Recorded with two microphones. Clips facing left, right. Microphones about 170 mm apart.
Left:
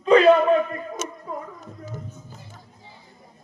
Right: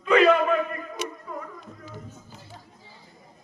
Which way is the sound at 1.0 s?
45° left (ahead or behind).